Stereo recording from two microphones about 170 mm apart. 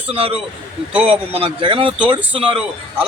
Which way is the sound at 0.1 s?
35° right (ahead or behind).